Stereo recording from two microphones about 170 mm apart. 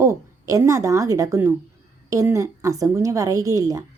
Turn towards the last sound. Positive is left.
turn(degrees=-20)  # may be behind; listen again after turning